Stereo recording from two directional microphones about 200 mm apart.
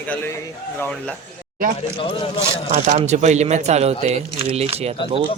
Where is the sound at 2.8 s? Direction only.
35° right (ahead or behind).